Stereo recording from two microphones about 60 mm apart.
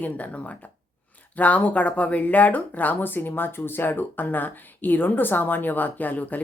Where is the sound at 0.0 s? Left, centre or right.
Left.